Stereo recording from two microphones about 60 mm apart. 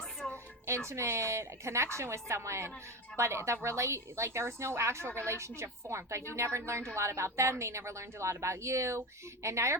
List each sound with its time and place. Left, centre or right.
0.9 s a woman's voice: right